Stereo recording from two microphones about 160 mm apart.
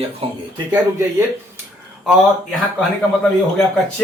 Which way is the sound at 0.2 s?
35° right (ahead or behind).